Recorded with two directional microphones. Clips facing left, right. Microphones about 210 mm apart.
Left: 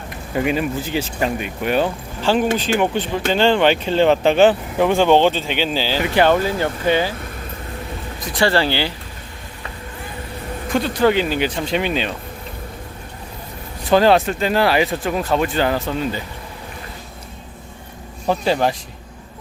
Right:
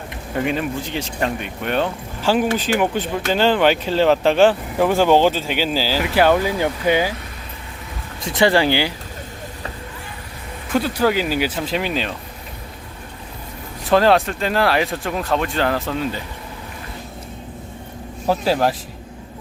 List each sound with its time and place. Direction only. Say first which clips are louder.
0.4 s speech: left 2 dB; 5° left (ahead or behind)
2.2 s speech: left 1 dB; 10° right (ahead or behind)
8.2 s speech: right 2 dB; 20° right (ahead or behind)
10.7 s speech: left 1 dB; 5° right (ahead or behind)
13.8 s speech: left 1 dB; centre (ahead or behind)
18.3 s speech: even; 5° right (ahead or behind)